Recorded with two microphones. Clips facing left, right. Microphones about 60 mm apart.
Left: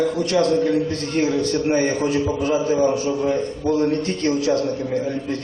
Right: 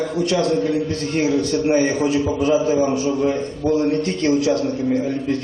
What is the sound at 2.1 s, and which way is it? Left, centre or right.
Speech, centre.